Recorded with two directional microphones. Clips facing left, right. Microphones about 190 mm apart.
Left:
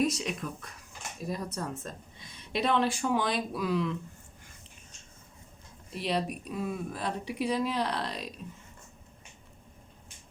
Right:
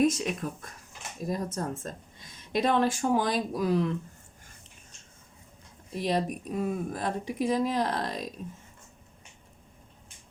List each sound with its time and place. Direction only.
0.0 s a woman's voice: 50° right (ahead or behind)
6.0 s a woman's voice: 45° right (ahead or behind)